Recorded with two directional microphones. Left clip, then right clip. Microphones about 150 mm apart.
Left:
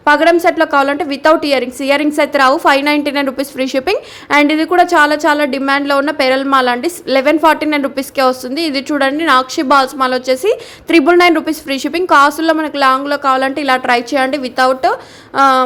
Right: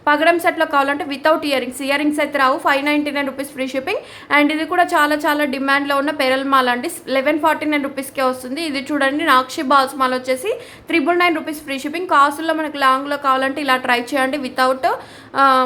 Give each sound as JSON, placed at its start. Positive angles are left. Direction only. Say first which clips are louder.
{"t": 0.0, "sound": "a woman's voice", "louder": "left 5 dB", "side_deg": 25}